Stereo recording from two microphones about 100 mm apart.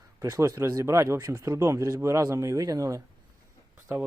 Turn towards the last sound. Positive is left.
turn(degrees=-20)  # may be behind; listen again after turning